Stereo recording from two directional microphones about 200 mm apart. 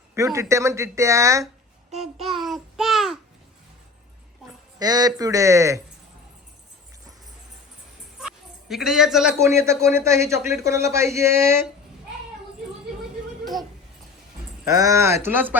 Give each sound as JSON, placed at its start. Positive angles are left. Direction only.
{"t": 0.3, "sound": "a man's voice", "side_deg": -15}
{"t": 2.0, "sound": "child singing", "side_deg": 0}
{"t": 4.8, "sound": "a man's voice", "side_deg": -20}
{"t": 8.7, "sound": "a man's voice", "side_deg": 0}
{"t": 9.4, "sound": "a man's voice", "side_deg": -15}
{"t": 13.4, "sound": "a sound", "side_deg": 0}
{"t": 14.6, "sound": "a man's voice", "side_deg": -15}